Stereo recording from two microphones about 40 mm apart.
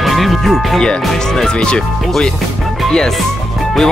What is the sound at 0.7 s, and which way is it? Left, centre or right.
Speech, centre.